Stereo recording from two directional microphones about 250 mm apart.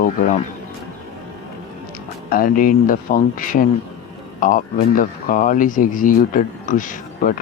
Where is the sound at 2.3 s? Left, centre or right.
Left.